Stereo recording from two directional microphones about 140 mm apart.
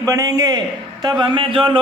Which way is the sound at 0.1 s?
25° right (ahead or behind).